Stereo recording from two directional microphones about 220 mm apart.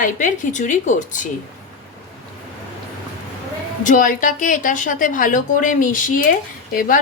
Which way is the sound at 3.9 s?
35° left (ahead or behind).